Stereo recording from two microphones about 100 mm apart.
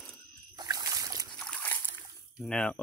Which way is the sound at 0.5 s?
40° right (ahead or behind).